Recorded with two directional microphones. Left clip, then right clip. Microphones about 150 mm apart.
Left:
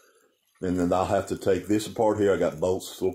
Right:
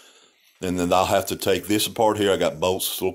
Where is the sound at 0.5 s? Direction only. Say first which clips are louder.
Right 4 dB; 35° right (ahead or behind).